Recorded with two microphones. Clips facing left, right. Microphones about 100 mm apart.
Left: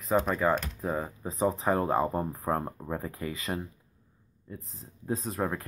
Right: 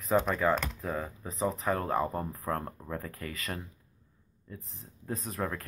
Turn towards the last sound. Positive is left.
turn(degrees=20)  # may be behind; listen again after turning